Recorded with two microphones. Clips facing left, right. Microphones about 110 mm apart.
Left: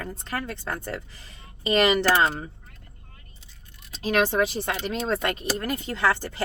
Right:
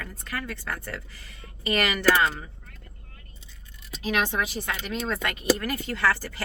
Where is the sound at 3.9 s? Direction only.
35° left (ahead or behind).